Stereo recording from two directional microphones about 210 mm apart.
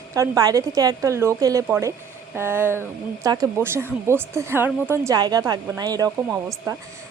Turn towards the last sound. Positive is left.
turn(degrees=-15)  # may be behind; listen again after turning